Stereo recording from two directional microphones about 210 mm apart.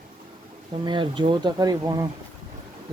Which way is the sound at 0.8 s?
20° right (ahead or behind).